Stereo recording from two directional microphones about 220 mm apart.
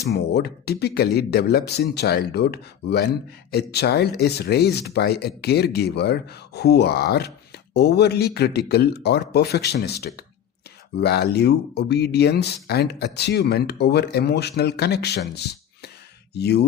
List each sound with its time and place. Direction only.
0.0 s speech: 45° left (ahead or behind)